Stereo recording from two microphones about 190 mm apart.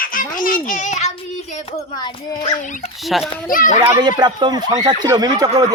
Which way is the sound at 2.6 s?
40° left (ahead or behind).